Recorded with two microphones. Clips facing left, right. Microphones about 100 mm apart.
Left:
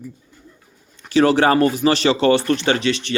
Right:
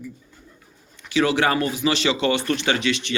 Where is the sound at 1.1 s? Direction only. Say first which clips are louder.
Left 5 dB; 40° left (ahead or behind).